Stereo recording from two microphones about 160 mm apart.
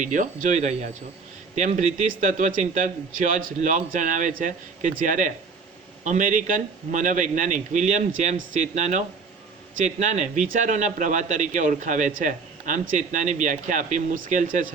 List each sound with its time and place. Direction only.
0.0 s speech: 55° right (ahead or behind)